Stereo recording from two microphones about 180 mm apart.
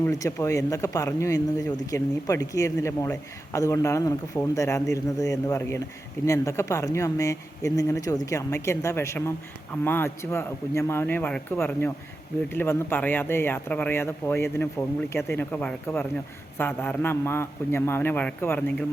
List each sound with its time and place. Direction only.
0.0 s speech: 15° left (ahead or behind)